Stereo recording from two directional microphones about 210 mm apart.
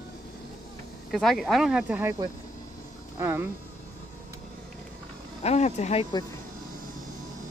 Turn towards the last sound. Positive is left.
turn(degrees=30)  # may be behind; listen again after turning